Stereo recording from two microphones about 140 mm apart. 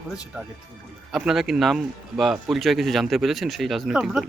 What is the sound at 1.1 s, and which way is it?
A man's voice, centre (ahead or behind).